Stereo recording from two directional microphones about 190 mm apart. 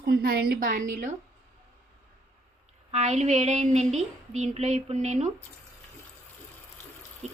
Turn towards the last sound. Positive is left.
turn(degrees=-35)  # may be behind; listen again after turning